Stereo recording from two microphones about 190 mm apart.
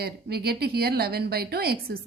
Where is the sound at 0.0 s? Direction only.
55° right (ahead or behind).